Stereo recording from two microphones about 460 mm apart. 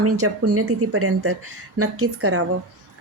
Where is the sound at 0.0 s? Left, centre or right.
Right.